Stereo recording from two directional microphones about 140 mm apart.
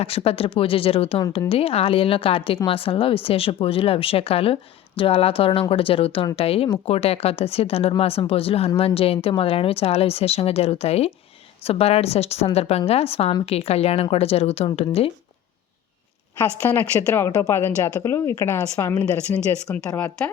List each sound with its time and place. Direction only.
0.0 s a woman's voice: 45° left (ahead or behind)
16.4 s a woman's voice: 15° left (ahead or behind)